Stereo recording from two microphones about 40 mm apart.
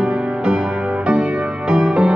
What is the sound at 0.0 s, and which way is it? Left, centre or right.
Music, right.